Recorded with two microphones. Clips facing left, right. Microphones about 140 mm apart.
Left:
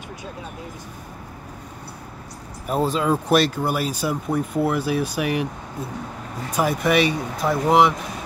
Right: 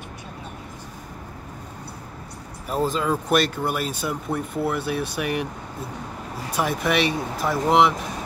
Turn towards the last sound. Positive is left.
turn(degrees=0)  # may be behind; listen again after turning